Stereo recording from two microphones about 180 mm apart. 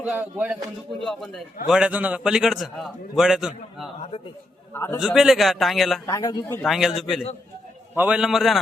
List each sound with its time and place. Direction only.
0.0 s speech: 10° right (ahead or behind)
1.0 s a man's voice: centre (ahead or behind)
4.7 s a man's voice: 15° left (ahead or behind)
4.9 s a man's voice: centre (ahead or behind)
6.1 s speech: 20° left (ahead or behind)
6.7 s a man's voice: centre (ahead or behind)